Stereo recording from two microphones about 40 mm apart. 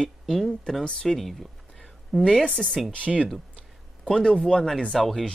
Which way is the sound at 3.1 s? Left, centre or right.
Centre.